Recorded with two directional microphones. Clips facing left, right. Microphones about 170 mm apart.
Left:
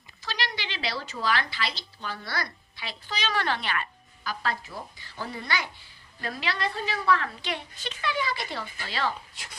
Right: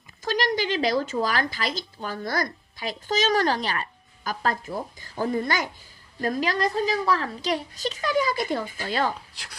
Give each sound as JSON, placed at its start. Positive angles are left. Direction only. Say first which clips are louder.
{"t": 0.2, "sound": "a woman's voice", "louder": "right 10 dB", "side_deg": -45}
{"t": 9.3, "sound": "a woman's voice", "louder": "right 1 dB", "side_deg": 0}